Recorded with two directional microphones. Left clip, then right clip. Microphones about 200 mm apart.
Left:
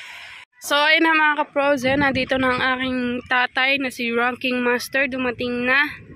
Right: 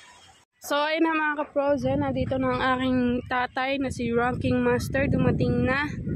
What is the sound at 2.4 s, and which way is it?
A woman's voice, 10° right (ahead or behind).